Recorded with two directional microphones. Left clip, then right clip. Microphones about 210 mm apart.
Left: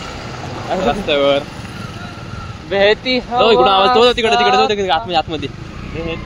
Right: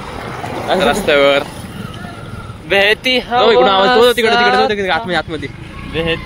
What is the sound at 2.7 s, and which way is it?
Speech, 50° right (ahead or behind).